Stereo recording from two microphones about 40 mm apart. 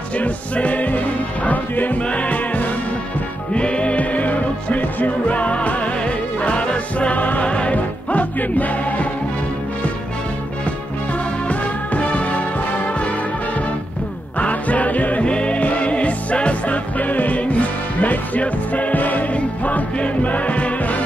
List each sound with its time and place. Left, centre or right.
0.2 s music: left
2.0 s music: left
3.5 s music: left
7.2 s music: left
7.4 s music: left
11.4 s music: left
14.4 s music: left
15.2 s music: left
19.3 s music: left